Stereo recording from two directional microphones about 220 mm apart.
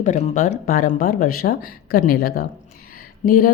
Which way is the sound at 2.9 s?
40° left (ahead or behind).